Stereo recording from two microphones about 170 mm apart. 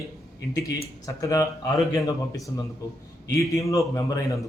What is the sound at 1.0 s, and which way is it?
Speech, 20° left (ahead or behind).